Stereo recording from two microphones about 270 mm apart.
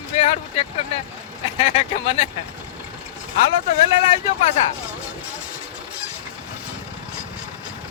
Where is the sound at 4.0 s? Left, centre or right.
Left.